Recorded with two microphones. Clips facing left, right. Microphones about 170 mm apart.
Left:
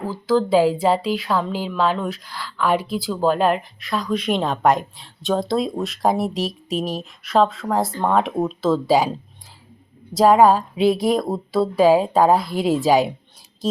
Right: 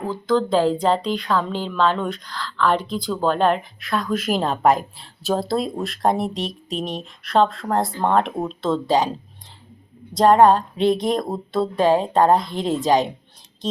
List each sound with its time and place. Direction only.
0.0 s speech: 5° left (ahead or behind)
10.2 s speech: 5° left (ahead or behind)